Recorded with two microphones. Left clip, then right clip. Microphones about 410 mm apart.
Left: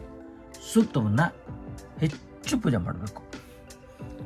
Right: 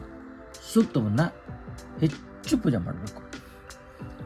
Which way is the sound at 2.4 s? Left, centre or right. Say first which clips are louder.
Right 1 dB; centre.